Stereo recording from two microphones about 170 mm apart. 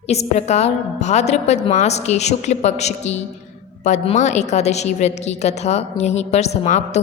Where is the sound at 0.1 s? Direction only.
40° left (ahead or behind).